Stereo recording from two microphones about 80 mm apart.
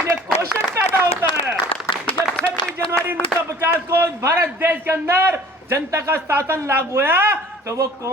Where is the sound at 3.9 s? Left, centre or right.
Right.